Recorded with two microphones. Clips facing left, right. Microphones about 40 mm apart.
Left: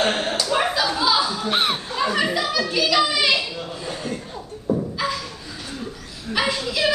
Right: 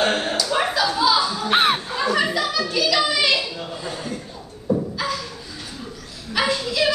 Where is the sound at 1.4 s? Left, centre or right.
Centre.